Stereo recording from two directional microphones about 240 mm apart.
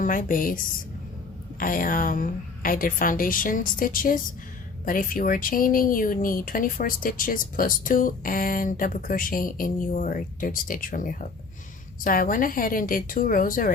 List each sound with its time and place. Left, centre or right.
0.0 s speech: left